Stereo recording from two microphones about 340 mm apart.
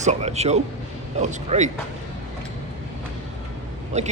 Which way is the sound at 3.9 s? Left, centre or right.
Centre.